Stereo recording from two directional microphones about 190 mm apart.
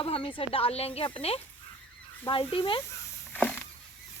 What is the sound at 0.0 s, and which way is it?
Speech, 30° left (ahead or behind).